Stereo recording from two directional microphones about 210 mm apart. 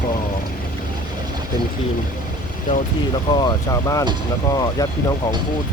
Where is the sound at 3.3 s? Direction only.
20° left (ahead or behind).